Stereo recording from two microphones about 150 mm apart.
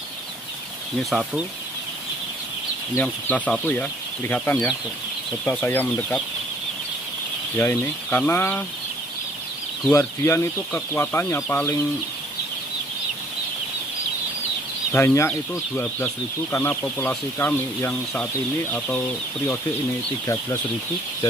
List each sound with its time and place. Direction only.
1.1 s speech: centre (ahead or behind)
3.0 s speech: 10° left (ahead or behind)
7.5 s speech: 15° left (ahead or behind)
9.8 s speech: 15° left (ahead or behind)
14.9 s speech: 15° left (ahead or behind)